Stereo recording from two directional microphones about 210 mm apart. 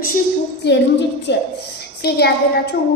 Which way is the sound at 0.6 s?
50° left (ahead or behind).